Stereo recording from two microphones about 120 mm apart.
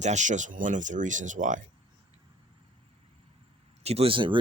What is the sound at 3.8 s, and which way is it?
Speech, 55° right (ahead or behind).